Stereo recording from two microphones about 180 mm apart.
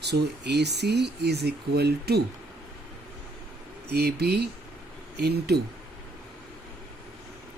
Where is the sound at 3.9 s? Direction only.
65° right (ahead or behind).